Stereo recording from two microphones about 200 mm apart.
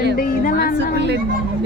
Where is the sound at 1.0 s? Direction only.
60° right (ahead or behind).